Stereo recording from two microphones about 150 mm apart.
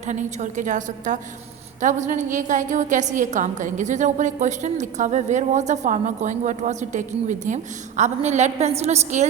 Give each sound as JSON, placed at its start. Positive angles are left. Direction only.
{"t": 0.0, "sound": "a woman's voice", "side_deg": -55}